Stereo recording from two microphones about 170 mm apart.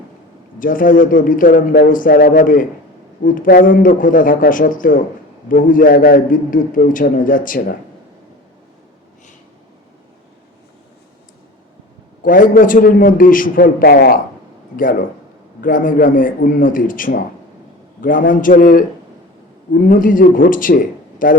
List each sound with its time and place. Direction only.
0.6 s a man's voice: 55° left (ahead or behind)
12.2 s a man's voice: 55° left (ahead or behind)
15.6 s a man's voice: 55° left (ahead or behind)